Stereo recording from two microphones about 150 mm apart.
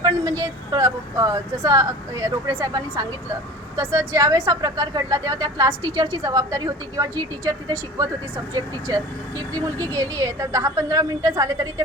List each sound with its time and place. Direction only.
0.0 s speech: 25° right (ahead or behind)
9.5 s speech: 15° left (ahead or behind)
9.9 s speech: 20° right (ahead or behind)